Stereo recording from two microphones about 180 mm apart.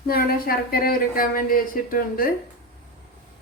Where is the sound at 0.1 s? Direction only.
55° left (ahead or behind).